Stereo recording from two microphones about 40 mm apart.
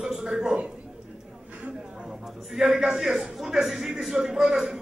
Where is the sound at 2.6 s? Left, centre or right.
Centre.